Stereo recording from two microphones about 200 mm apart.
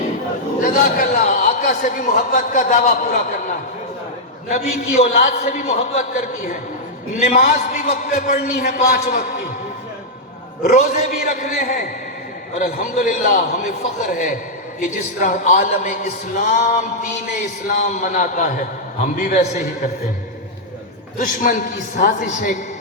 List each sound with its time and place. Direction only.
0.6 s a man's voice: 45° left (ahead or behind)
7.3 s a man's voice: 50° left (ahead or behind)
7.9 s a man's voice: 35° left (ahead or behind)
8.5 s a man's voice: 50° left (ahead or behind)
10.6 s a man's voice: 35° left (ahead or behind)
21.2 s a man's voice: 40° left (ahead or behind)